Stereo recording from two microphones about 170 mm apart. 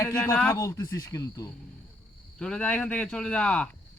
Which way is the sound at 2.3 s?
5° left (ahead or behind).